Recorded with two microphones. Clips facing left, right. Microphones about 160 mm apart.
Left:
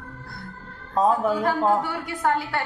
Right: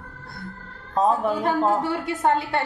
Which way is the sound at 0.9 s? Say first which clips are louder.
Even; centre (ahead or behind).